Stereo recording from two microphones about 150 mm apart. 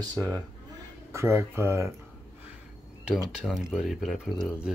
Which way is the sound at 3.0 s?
5° right (ahead or behind).